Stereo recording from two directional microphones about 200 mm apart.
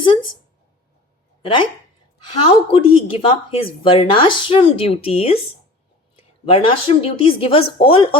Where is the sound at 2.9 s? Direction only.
25° left (ahead or behind).